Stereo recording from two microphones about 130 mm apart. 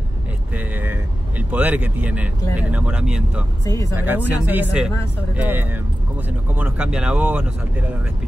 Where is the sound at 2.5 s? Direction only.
10° right (ahead or behind).